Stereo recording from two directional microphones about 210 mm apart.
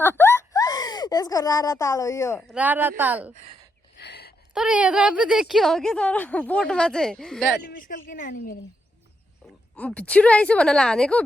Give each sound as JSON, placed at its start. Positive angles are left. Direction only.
{"t": 0.0, "sound": "a sound", "side_deg": 10}
{"t": 2.5, "sound": "speech", "side_deg": -5}
{"t": 3.3, "sound": "speech", "side_deg": -30}
{"t": 3.9, "sound": "a sound", "side_deg": 50}
{"t": 4.5, "sound": "a woman's voice", "side_deg": -5}
{"t": 7.5, "sound": "speech", "side_deg": 45}
{"t": 9.7, "sound": "a woman's voice", "side_deg": 5}